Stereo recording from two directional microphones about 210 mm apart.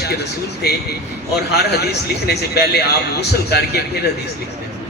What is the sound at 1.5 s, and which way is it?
A man's voice, 50° left (ahead or behind).